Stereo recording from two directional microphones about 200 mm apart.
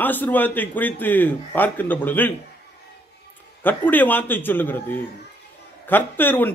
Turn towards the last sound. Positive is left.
turn(degrees=10)  # may be behind; listen again after turning